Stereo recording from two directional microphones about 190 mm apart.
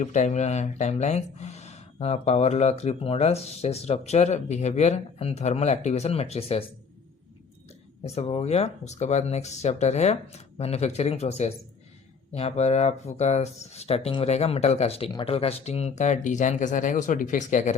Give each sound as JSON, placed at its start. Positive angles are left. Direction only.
{"t": 0.0, "sound": "speech", "side_deg": 40}
{"t": 8.0, "sound": "speech", "side_deg": 35}